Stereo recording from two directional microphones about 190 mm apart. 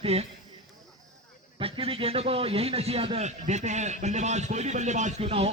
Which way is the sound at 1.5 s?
30° right (ahead or behind).